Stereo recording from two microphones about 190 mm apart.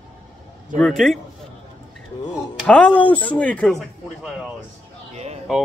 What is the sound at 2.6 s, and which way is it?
Speech, 5° left (ahead or behind).